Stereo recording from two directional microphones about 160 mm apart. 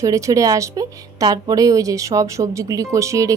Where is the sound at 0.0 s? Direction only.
20° right (ahead or behind).